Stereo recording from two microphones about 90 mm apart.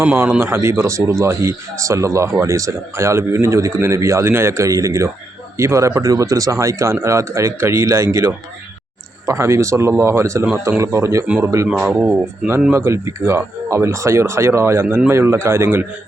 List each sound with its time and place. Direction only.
0.0 s speech: 25° right (ahead or behind)
12.7 s speech: 30° right (ahead or behind)